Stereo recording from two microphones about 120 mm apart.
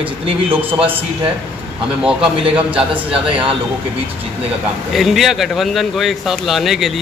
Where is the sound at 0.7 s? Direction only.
15° right (ahead or behind).